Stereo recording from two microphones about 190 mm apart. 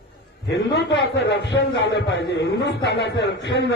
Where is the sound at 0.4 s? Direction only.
70° left (ahead or behind).